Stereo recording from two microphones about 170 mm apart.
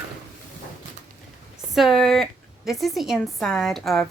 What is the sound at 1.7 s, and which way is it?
A woman's voice, centre (ahead or behind).